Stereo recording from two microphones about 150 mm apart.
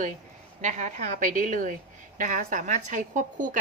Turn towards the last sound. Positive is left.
turn(degrees=-60)  # may be behind; listen again after turning